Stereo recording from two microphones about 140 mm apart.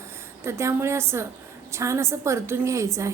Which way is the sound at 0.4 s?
20° right (ahead or behind).